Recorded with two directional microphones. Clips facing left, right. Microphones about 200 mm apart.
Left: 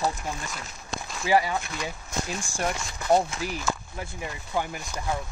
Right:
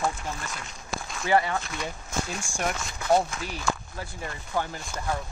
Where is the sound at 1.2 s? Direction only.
10° left (ahead or behind).